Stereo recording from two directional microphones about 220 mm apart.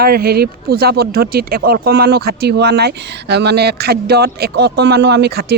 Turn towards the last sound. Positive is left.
turn(degrees=-45)  # may be behind; listen again after turning